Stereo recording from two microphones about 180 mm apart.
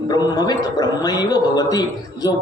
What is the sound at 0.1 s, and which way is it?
A man's voice, 20° left (ahead or behind).